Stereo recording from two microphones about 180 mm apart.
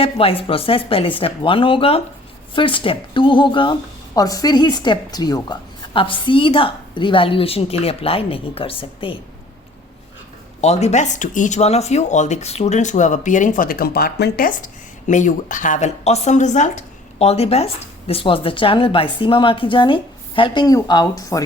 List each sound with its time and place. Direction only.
0.0 s speech: 30° left (ahead or behind)
10.6 s speech: 40° left (ahead or behind); by 21.4 s 20° left (ahead or behind)